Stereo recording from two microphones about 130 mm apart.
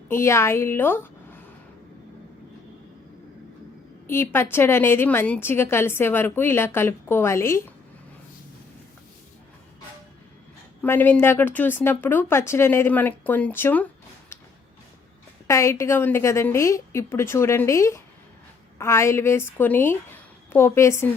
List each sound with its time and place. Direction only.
0.1 s a woman's voice: 20° left (ahead or behind)
4.0 s a woman's voice: 20° left (ahead or behind)
10.8 s a woman's voice: 15° left (ahead or behind)
15.4 s a woman's voice: 20° left (ahead or behind)